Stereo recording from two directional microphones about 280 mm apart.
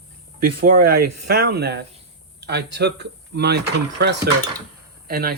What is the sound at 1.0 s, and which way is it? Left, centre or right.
Speech, right.